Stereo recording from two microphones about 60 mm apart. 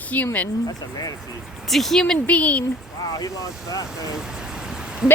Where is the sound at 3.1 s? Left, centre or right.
Left.